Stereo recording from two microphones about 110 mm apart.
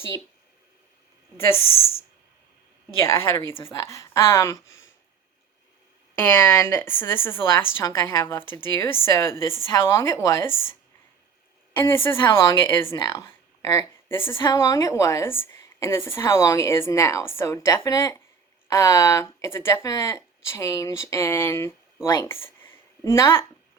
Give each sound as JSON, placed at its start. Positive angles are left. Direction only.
{"t": 3.0, "sound": "a woman's voice", "side_deg": 25}
{"t": 6.1, "sound": "a woman's voice", "side_deg": 20}
{"t": 11.8, "sound": "a woman's voice", "side_deg": 25}